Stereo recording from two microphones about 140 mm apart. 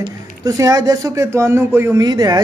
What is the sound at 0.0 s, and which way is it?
Speech, 25° right (ahead or behind).